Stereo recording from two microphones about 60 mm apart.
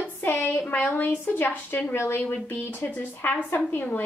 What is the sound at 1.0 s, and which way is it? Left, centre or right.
A woman's voice, left.